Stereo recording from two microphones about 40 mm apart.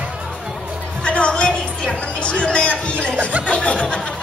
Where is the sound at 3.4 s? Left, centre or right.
Left.